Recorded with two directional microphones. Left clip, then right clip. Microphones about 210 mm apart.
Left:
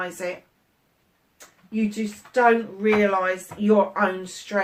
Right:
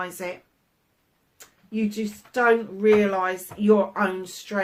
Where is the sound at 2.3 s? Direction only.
45° right (ahead or behind).